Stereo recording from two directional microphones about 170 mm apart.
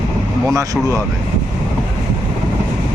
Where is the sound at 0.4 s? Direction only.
20° right (ahead or behind).